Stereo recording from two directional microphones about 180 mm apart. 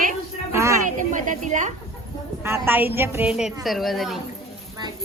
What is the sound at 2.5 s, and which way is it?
A woman's voice, 10° right (ahead or behind).